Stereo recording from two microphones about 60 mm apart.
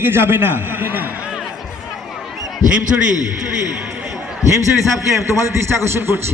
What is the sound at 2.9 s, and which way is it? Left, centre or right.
Speech, centre.